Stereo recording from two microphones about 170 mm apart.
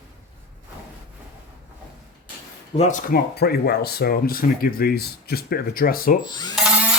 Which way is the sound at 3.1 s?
65° left (ahead or behind).